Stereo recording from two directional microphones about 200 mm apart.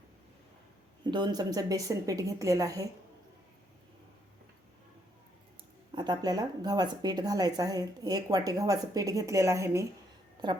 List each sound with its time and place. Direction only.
1.1 s a woman's voice: 20° right (ahead or behind)
5.9 s speech: 20° right (ahead or behind)